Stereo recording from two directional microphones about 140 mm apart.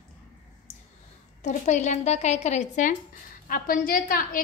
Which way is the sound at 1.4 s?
60° left (ahead or behind).